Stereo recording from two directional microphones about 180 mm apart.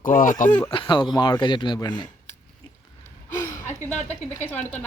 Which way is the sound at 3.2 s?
15° left (ahead or behind).